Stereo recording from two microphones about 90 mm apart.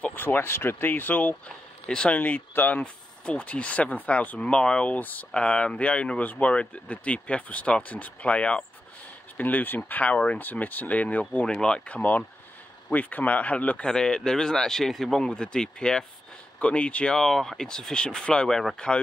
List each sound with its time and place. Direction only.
0.0 s speech: 20° left (ahead or behind); by 18.9 s 5° left (ahead or behind)